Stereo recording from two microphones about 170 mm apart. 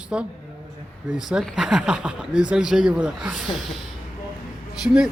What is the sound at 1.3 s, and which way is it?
Speech, centre (ahead or behind).